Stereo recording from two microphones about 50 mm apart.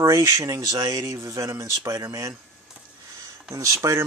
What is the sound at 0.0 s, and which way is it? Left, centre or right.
Speech, right.